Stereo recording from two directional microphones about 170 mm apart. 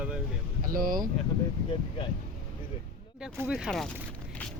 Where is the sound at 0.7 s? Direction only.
55° right (ahead or behind).